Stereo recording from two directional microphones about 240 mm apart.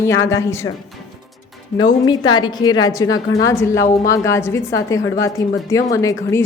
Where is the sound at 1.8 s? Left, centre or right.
Centre.